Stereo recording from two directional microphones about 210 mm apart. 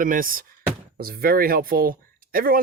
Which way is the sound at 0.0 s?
40° right (ahead or behind).